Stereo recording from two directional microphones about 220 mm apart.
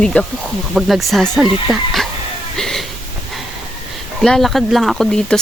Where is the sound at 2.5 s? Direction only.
Centre (ahead or behind).